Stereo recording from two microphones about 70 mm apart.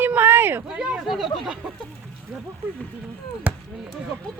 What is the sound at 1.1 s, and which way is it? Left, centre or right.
Speech, centre.